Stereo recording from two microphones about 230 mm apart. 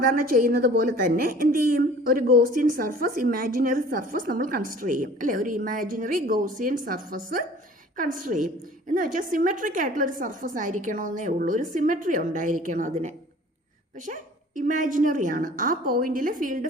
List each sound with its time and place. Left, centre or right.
0.0 s a woman's voice: right